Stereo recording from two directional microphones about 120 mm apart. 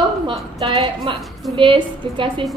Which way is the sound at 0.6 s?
50° right (ahead or behind).